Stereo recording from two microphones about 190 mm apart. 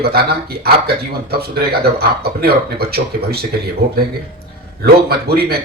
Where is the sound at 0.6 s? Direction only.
55° right (ahead or behind).